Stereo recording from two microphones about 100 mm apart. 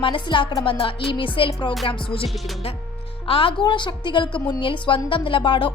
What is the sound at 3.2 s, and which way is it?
Speech, 65° left (ahead or behind).